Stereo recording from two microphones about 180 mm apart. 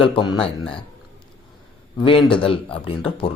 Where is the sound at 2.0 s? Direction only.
30° left (ahead or behind).